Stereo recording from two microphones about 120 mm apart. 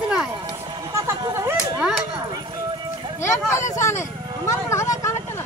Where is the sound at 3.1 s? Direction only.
25° left (ahead or behind).